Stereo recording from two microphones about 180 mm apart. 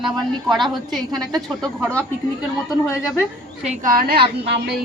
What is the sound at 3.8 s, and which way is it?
A woman's voice, 50° right (ahead or behind).